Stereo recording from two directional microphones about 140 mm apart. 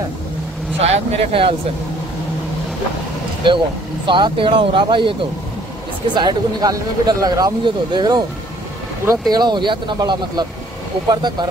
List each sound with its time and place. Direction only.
0.7 s speech: 50° right (ahead or behind)
3.4 s speech: 35° right (ahead or behind)
6.1 s speech: 30° right (ahead or behind)
9.3 s speech: 30° right (ahead or behind)